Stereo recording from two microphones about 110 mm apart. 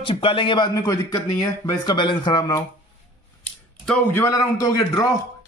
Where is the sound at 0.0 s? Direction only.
50° left (ahead or behind).